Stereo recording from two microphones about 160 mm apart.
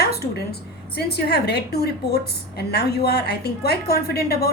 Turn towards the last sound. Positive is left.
turn(degrees=75)  # may be behind; listen again after turning